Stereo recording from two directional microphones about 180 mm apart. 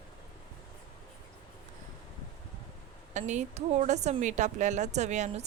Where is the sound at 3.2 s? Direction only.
40° right (ahead or behind).